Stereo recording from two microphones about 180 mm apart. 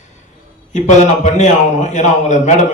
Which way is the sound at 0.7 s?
45° left (ahead or behind).